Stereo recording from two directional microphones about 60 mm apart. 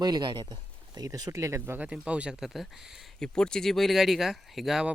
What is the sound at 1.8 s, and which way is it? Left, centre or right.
Speech, right.